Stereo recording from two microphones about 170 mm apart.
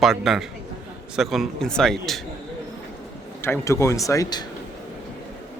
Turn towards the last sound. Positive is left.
turn(degrees=20)  # may be behind; listen again after turning